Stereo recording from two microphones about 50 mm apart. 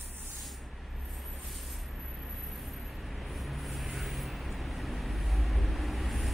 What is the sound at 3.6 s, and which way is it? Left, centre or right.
Vehicle, centre.